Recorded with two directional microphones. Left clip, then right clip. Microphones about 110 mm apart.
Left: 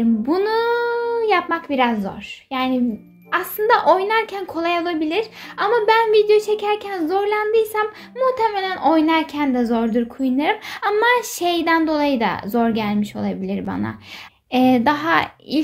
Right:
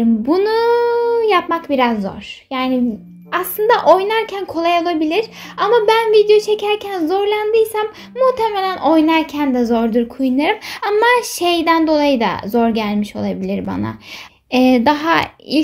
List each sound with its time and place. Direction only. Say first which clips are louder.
0.3 s a child's voice: right 5 dB; 25° right (ahead or behind)